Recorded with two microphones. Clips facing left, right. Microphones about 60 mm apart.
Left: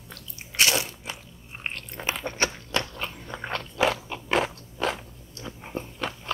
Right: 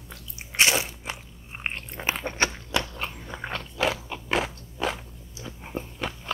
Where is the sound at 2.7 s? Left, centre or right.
Centre.